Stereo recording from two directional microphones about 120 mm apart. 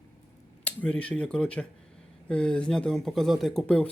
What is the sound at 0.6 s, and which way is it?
Speech, 10° left (ahead or behind).